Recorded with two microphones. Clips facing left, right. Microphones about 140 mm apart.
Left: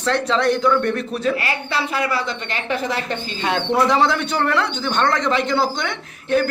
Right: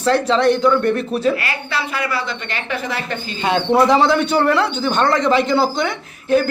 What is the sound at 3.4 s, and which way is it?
Speech, 5° right (ahead or behind).